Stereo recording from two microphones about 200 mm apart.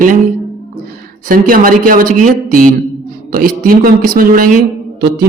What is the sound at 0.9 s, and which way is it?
Speech, 45° right (ahead or behind).